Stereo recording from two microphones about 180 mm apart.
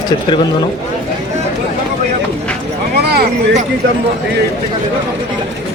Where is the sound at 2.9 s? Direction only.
65° right (ahead or behind).